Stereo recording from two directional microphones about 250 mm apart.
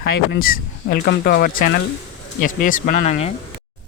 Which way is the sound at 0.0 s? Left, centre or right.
Left.